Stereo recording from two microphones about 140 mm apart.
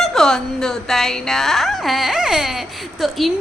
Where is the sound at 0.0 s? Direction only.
Centre (ahead or behind).